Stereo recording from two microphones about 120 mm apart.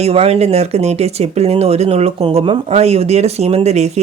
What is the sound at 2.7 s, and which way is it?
Speech, 60° right (ahead or behind).